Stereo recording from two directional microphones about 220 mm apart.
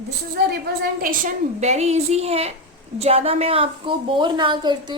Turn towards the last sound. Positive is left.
turn(degrees=-20)  # may be behind; listen again after turning